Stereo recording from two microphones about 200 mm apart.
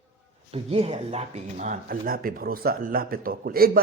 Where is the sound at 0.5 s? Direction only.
30° right (ahead or behind).